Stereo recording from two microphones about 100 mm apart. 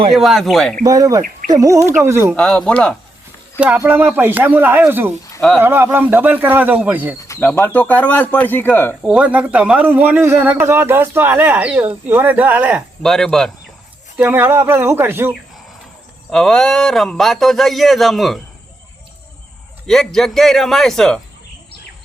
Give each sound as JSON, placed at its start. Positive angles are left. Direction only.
{"t": 0.1, "sound": "speech", "side_deg": 0}
{"t": 0.9, "sound": "speech", "side_deg": -35}
{"t": 2.3, "sound": "speech", "side_deg": 10}
{"t": 3.6, "sound": "a man's voice", "side_deg": -15}
{"t": 7.3, "sound": "speech", "side_deg": 20}
{"t": 9.0, "sound": "speech", "side_deg": -10}
{"t": 13.0, "sound": "speech", "side_deg": 5}
{"t": 14.2, "sound": "a man's voice", "side_deg": -20}
{"t": 16.3, "sound": "speech", "side_deg": 5}
{"t": 19.9, "sound": "speech", "side_deg": 5}